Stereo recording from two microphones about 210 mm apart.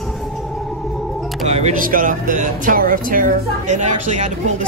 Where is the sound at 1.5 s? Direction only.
35° right (ahead or behind).